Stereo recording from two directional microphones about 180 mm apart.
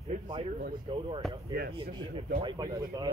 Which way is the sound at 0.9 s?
25° right (ahead or behind).